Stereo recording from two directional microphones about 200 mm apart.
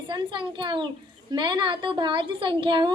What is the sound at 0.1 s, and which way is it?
A child's voice, 25° right (ahead or behind).